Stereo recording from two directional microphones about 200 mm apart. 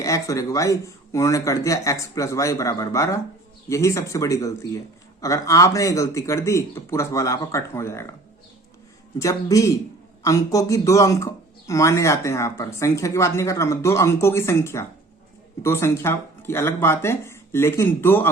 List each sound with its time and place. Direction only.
0.0 s a man's voice: 15° left (ahead or behind)
9.1 s a man's voice: 15° left (ahead or behind)